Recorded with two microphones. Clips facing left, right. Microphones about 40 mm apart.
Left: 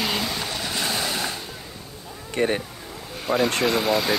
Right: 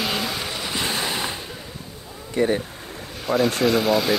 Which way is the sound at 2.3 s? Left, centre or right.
Left.